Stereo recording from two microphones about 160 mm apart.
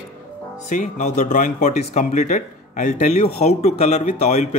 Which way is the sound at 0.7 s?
50° left (ahead or behind).